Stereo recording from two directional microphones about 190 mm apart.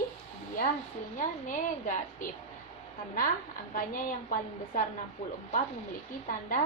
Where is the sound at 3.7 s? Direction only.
45° left (ahead or behind).